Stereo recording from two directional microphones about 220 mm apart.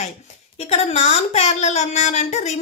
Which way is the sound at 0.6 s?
30° left (ahead or behind).